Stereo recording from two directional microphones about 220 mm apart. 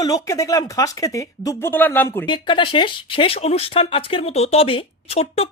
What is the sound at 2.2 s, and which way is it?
Speech, 20° left (ahead or behind).